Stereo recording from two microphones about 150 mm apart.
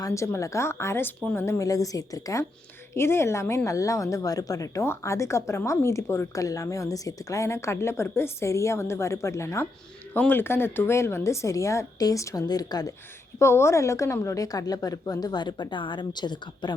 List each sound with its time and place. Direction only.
0.0 s a woman's voice: 20° left (ahead or behind)
1.5 s a woman's voice: 20° left (ahead or behind)